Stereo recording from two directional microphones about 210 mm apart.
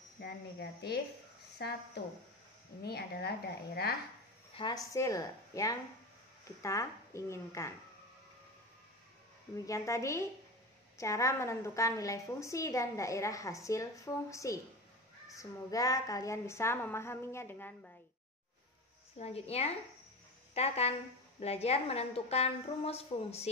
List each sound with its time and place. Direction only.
0.2 s a woman's voice: 50° left (ahead or behind)
2.8 s a woman's voice: 50° left (ahead or behind)
4.6 s a woman's voice: 25° left (ahead or behind)
9.7 s a woman's voice: 15° left (ahead or behind)
19.1 s a woman's voice: 30° left (ahead or behind)